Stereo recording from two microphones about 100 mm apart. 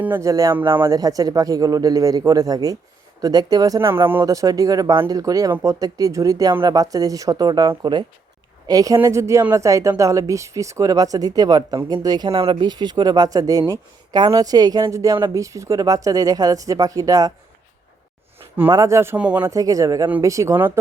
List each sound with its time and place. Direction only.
0.2 s speech: 35° right (ahead or behind)
0.6 s speech: 50° right (ahead or behind)
0.9 s speech: 40° right (ahead or behind)
3.8 s speech: 25° right (ahead or behind)
6.5 s speech: 55° right (ahead or behind)
6.7 s speech: 35° right (ahead or behind)
8.6 s speech: 40° right (ahead or behind)
12.3 s speech: 70° right (ahead or behind)
12.5 s speech: 45° right (ahead or behind)
18.7 s speech: 30° right (ahead or behind)
19.1 s speech: 15° right (ahead or behind)
19.5 s speech: 35° right (ahead or behind)